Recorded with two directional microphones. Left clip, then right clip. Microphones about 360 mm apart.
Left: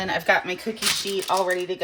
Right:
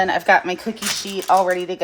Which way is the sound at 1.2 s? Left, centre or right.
Right.